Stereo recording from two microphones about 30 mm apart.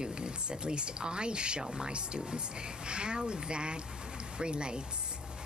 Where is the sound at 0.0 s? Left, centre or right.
Right.